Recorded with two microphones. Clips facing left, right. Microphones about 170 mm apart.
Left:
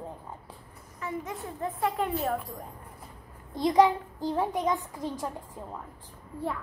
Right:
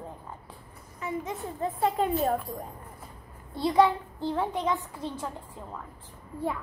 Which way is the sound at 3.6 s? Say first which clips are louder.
Left 1 dB; 15° left (ahead or behind).